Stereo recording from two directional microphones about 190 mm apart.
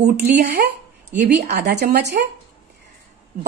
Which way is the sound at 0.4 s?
55° right (ahead or behind).